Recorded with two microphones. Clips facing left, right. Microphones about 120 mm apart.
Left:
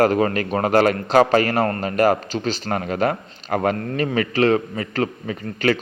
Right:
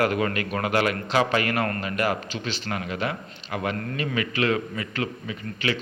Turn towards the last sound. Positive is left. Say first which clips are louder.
# left 7 dB
turn(degrees=45)  # may be behind; listen again after turning